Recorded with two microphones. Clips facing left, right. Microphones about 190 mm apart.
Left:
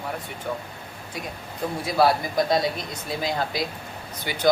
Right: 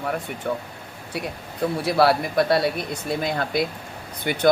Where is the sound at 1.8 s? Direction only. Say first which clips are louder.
Right 1 dB; 70° right (ahead or behind).